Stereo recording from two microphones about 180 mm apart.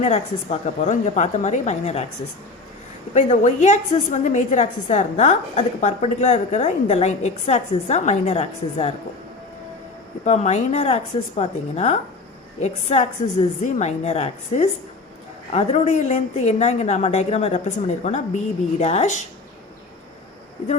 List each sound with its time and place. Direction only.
0.0 s a woman's voice: 40° left (ahead or behind)
3.2 s a woman's voice: 40° left (ahead or behind)
10.2 s a woman's voice: 35° left (ahead or behind)